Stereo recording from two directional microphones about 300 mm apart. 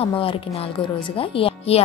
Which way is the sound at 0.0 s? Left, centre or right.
Centre.